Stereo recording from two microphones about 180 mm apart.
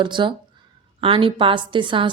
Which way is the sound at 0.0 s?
25° right (ahead or behind).